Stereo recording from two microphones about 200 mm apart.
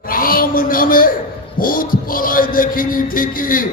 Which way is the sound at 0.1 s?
45° left (ahead or behind).